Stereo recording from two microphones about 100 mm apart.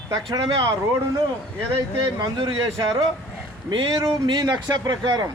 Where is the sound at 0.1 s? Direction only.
50° right (ahead or behind).